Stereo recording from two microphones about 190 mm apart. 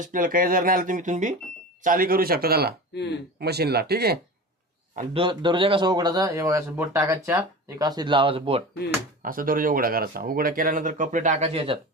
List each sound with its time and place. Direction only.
0.0 s speech: 45° right (ahead or behind)
2.9 s speech: 65° left (ahead or behind)
3.4 s speech: 60° right (ahead or behind)
4.9 s a man's voice: 30° right (ahead or behind)
9.2 s speech: 45° right (ahead or behind); by 11.8 s 30° right (ahead or behind)